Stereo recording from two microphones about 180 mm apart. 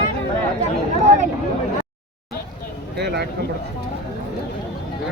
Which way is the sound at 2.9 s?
65° right (ahead or behind).